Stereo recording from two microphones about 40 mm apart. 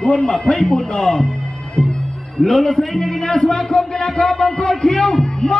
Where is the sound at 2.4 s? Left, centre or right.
Centre.